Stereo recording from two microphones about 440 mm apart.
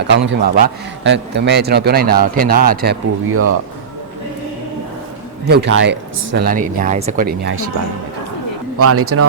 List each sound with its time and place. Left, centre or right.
0.3 s a man's voice: right
5.5 s a man's voice: right
8.8 s speech: right